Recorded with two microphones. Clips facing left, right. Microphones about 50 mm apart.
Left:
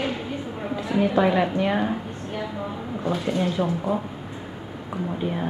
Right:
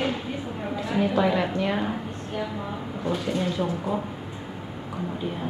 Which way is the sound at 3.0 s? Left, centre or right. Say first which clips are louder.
Left 2 dB; centre.